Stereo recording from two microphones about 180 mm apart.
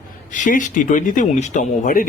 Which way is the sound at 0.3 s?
45° left (ahead or behind).